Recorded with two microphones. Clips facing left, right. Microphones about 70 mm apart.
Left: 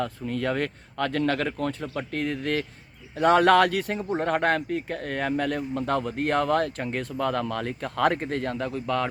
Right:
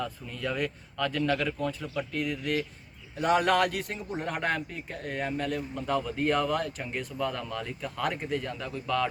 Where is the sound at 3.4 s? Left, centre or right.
Left.